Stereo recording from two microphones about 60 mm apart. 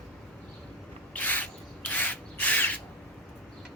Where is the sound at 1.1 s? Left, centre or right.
Left.